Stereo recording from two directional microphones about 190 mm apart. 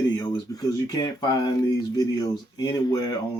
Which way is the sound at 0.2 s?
20° left (ahead or behind).